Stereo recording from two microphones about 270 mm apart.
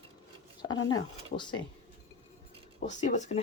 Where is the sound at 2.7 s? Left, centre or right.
Left.